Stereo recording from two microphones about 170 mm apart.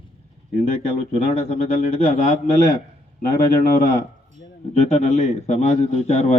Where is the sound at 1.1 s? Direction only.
40° left (ahead or behind).